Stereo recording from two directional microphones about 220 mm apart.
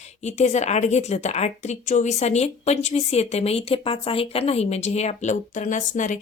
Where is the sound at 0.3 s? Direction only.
30° left (ahead or behind).